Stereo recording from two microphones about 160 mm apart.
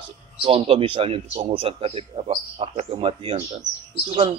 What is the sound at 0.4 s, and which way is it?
A man's voice, 35° right (ahead or behind).